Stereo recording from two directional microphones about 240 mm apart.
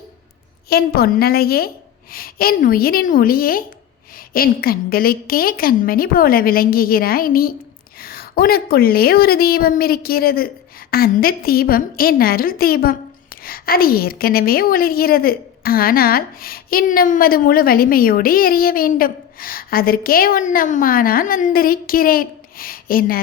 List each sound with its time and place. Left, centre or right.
0.7 s a woman's voice: left